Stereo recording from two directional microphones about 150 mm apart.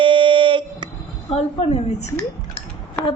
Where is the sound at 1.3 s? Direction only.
45° left (ahead or behind).